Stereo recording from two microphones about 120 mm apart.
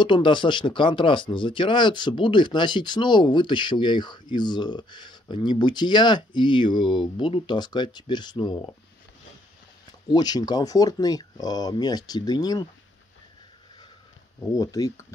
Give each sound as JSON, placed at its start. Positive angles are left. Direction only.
{"t": 0.0, "sound": "speech", "side_deg": 45}
{"t": 10.1, "sound": "speech", "side_deg": 35}
{"t": 14.5, "sound": "speech", "side_deg": 30}